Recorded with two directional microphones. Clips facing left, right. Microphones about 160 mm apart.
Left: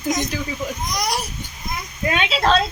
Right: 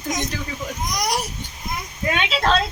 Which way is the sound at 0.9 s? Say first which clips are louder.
Right 2 dB; 15° right (ahead or behind).